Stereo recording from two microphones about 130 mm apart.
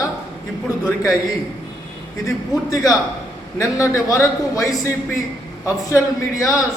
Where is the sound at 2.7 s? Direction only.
25° left (ahead or behind).